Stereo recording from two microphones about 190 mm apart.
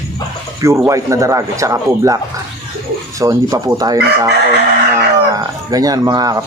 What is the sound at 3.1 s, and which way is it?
Speech, 15° right (ahead or behind).